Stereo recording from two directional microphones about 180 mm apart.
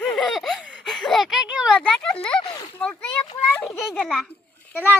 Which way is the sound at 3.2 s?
20° left (ahead or behind).